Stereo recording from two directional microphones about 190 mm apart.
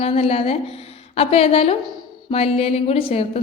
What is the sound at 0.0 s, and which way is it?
A woman's voice, 30° left (ahead or behind).